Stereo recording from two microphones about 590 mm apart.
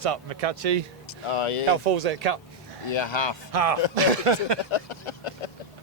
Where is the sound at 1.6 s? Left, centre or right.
Right.